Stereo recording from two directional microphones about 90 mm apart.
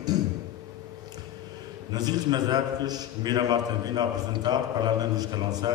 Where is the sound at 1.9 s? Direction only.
50° right (ahead or behind).